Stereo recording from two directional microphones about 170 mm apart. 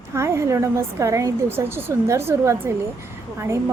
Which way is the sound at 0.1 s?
15° right (ahead or behind).